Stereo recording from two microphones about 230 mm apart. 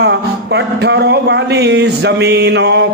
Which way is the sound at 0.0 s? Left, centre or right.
Right.